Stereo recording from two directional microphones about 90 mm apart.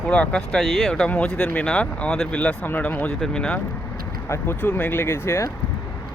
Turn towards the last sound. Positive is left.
turn(degrees=25)  # may be behind; listen again after turning